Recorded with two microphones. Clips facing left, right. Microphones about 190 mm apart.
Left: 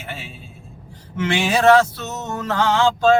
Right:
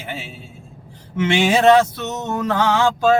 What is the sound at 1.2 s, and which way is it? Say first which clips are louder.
Mantra: right 2 dB; 20° right (ahead or behind).